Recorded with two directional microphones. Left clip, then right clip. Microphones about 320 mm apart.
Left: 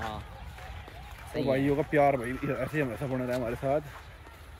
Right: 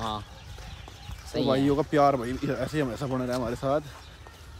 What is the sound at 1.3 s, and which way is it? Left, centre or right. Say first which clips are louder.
Speech: right 3 dB; centre.